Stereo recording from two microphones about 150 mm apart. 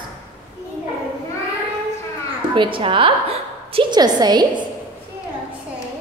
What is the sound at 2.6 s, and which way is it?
A woman's voice, 35° right (ahead or behind).